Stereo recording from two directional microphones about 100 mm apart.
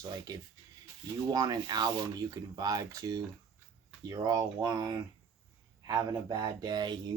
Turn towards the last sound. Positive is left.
turn(degrees=-45)  # may be behind; listen again after turning